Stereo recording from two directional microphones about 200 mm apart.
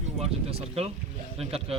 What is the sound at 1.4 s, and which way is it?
Speech, 30° right (ahead or behind).